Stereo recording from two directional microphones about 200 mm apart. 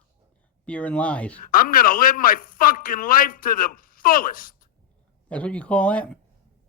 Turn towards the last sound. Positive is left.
turn(degrees=5)  # may be behind; listen again after turning